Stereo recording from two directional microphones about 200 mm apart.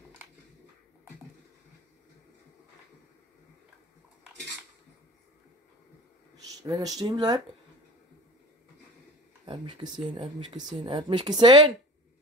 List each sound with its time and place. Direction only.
6.6 s speech: 20° right (ahead or behind)
9.5 s speech: 25° right (ahead or behind)